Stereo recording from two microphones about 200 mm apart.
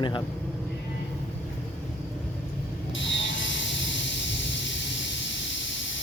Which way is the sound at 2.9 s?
70° left (ahead or behind).